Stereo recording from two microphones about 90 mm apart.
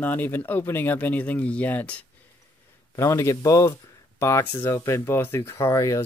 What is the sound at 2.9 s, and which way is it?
Speech, 35° left (ahead or behind).